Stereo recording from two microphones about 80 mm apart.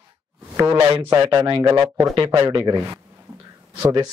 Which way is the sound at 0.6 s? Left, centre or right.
Right.